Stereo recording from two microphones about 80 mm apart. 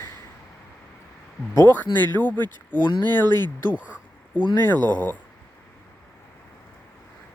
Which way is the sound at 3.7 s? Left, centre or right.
Centre.